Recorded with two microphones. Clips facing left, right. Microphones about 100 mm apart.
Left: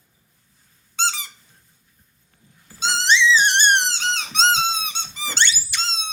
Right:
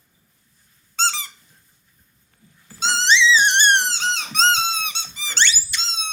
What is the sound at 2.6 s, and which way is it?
Music, centre (ahead or behind).